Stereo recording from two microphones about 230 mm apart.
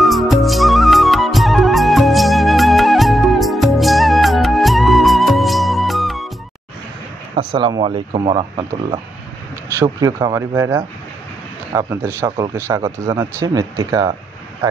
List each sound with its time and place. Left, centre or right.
0.0 s music: centre
7.3 s speech: centre
9.8 s speech: centre